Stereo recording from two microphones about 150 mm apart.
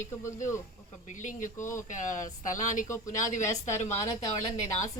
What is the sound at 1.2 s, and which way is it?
Speech, 60° left (ahead or behind).